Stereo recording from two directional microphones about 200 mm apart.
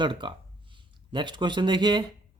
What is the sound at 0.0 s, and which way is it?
Speech, 25° right (ahead or behind).